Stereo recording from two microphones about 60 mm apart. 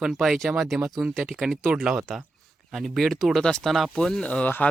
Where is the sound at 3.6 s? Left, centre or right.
Centre.